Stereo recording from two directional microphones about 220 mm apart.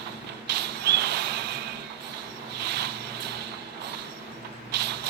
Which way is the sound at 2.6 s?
50° right (ahead or behind).